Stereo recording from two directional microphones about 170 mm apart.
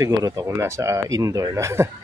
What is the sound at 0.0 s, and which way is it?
Speech, 20° right (ahead or behind).